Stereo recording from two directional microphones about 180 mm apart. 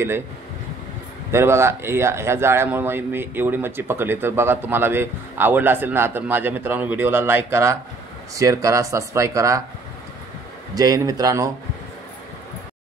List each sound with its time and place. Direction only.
1.3 s speech: 15° right (ahead or behind)
10.7 s speech: 20° right (ahead or behind)